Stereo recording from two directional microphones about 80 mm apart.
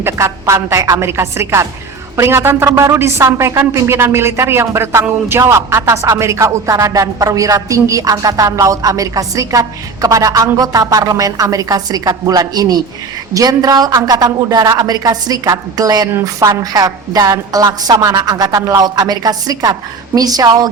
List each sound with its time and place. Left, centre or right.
0.0 s a woman's voice: right
18.9 s speech: right